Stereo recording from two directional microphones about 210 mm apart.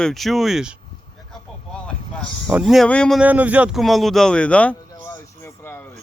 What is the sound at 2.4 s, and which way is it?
Speech, 5° right (ahead or behind).